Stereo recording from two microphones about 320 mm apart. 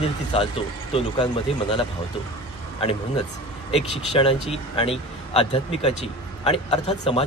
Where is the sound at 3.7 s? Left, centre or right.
Centre.